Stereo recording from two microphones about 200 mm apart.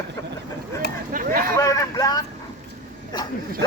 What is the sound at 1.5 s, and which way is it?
Vehicle, 15° left (ahead or behind).